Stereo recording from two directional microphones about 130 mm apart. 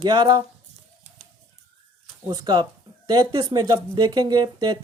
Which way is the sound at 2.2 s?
30° right (ahead or behind).